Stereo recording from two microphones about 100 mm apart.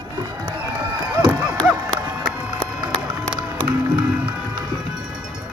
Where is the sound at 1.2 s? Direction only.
20° left (ahead or behind).